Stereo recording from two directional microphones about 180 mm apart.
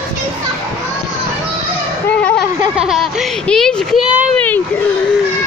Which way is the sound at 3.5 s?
5° left (ahead or behind).